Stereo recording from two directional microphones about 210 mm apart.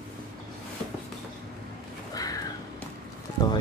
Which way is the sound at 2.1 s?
15° left (ahead or behind).